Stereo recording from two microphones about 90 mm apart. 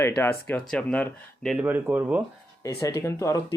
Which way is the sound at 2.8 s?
35° left (ahead or behind).